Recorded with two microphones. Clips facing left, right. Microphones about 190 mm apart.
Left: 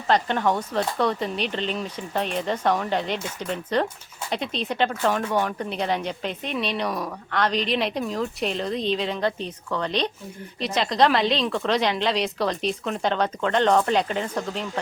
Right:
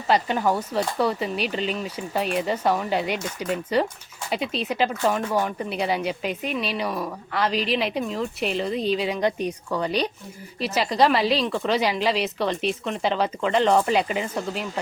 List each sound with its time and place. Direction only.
0.1 s speech: 5° right (ahead or behind)